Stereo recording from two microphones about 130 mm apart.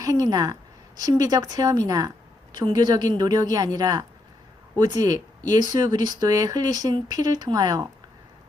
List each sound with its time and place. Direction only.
0.0 s a woman's voice: 30° right (ahead or behind)